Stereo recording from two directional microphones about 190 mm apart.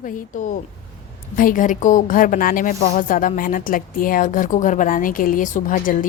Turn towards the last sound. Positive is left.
turn(degrees=45)  # may be behind; listen again after turning